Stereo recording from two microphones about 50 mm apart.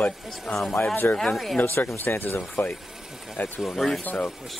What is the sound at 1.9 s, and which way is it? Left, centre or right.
Speech, left.